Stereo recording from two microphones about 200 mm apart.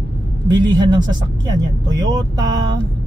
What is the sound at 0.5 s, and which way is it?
Speech, 20° right (ahead or behind).